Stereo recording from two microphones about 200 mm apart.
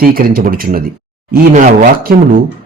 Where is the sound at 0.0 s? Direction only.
45° right (ahead or behind).